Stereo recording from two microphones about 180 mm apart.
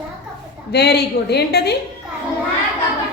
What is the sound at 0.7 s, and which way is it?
A woman's voice, 65° left (ahead or behind).